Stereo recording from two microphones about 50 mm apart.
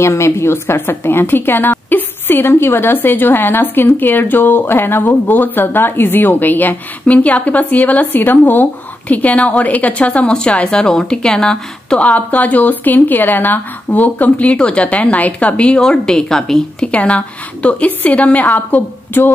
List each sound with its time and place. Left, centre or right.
0.0 s a woman's voice: left
9.1 s a woman's voice: left
12.1 s a woman's voice: left; by 16.6 s centre
16.8 s a woman's voice: left
19.2 s speech: left